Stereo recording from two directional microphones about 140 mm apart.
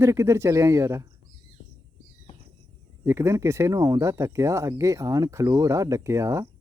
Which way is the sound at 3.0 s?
20° right (ahead or behind).